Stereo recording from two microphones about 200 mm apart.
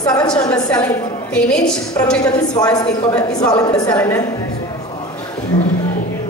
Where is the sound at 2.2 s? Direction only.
20° left (ahead or behind).